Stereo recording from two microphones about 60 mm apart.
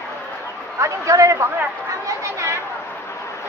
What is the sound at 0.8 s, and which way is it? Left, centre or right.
Speech, right.